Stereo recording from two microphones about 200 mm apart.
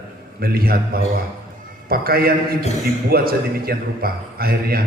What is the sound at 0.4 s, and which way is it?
A man's voice, 50° right (ahead or behind).